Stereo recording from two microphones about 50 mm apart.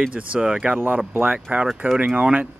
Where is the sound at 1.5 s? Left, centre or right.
Right.